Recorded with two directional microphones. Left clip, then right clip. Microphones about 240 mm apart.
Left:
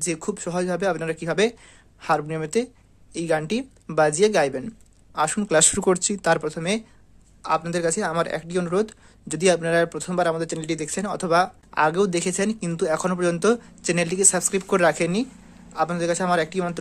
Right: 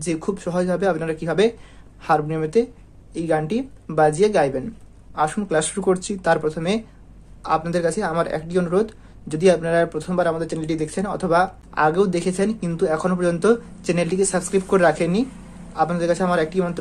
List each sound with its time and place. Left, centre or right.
0.0 s speech: left